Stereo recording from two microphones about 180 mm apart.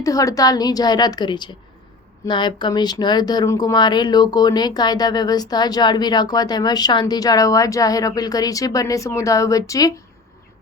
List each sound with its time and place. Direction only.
0.0 s speech: 20° left (ahead or behind)